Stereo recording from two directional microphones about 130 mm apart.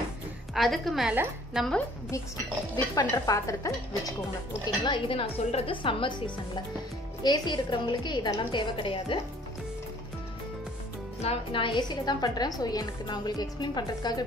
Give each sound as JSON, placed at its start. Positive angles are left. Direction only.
{"t": 0.6, "sound": "a woman's voice", "side_deg": 0}
{"t": 2.7, "sound": "speech", "side_deg": 30}
{"t": 4.8, "sound": "a woman's voice", "side_deg": 40}
{"t": 11.2, "sound": "a woman's voice", "side_deg": 40}